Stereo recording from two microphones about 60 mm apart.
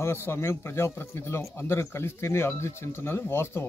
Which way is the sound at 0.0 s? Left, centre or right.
Left.